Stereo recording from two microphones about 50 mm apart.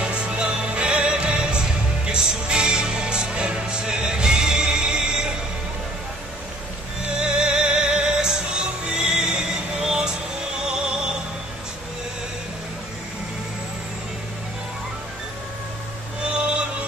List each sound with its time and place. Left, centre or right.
0.0 s music: right
7.2 s music: centre
16.3 s music: centre